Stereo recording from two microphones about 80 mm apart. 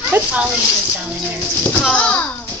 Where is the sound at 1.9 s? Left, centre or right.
Centre.